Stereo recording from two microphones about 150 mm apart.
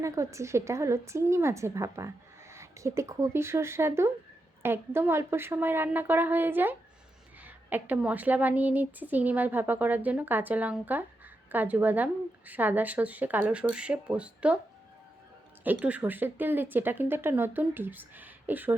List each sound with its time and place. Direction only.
0.0 s a woman's voice: 20° right (ahead or behind)
15.6 s a woman's voice: 10° right (ahead or behind)